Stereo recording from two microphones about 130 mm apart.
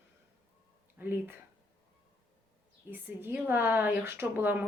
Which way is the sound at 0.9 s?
15° right (ahead or behind).